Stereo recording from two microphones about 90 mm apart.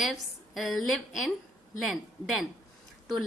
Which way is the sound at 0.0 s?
Centre (ahead or behind).